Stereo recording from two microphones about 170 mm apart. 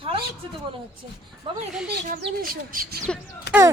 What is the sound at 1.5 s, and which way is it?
Speech, 30° right (ahead or behind).